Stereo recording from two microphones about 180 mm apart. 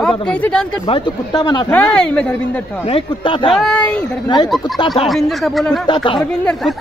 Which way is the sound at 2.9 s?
30° left (ahead or behind).